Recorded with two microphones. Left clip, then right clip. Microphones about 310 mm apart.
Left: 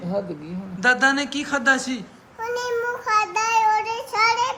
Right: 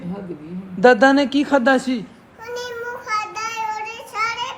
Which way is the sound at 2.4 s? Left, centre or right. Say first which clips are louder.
Left 4 dB; centre.